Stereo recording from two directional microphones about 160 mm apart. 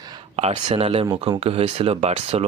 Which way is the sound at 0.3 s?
40° right (ahead or behind).